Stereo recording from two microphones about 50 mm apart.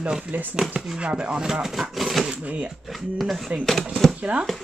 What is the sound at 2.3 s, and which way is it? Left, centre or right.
Speech, right.